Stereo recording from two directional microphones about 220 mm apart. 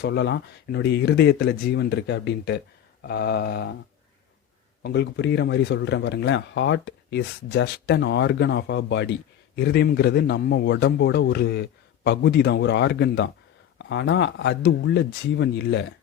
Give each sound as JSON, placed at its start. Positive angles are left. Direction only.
{"t": 0.0, "sound": "speech", "side_deg": 50}
{"t": 4.8, "sound": "speech", "side_deg": 50}